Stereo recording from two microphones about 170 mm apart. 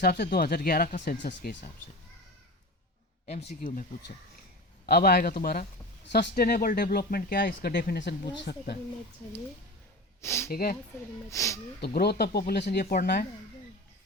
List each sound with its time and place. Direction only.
0.0 s speech: 65° left (ahead or behind)
1.2 s speech: 70° left (ahead or behind)
3.5 s speech: 50° left (ahead or behind)
4.9 s speech: 65° left (ahead or behind)
6.1 s speech: 70° left (ahead or behind)
10.2 s speech: 15° left (ahead or behind)
10.5 s speech: 60° left (ahead or behind)
11.3 s speech: 20° left (ahead or behind)
11.8 s speech: 70° left (ahead or behind)